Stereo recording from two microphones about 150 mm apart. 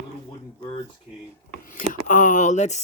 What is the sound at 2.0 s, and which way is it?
Speech, 60° left (ahead or behind).